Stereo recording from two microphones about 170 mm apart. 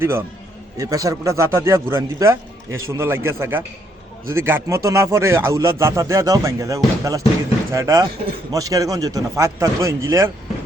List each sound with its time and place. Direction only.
0.0 s a man's voice: 15° right (ahead or behind)